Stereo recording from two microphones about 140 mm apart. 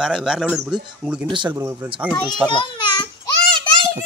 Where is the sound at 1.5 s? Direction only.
20° right (ahead or behind).